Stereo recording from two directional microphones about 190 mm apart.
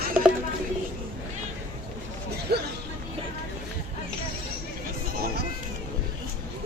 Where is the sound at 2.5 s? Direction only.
60° right (ahead or behind).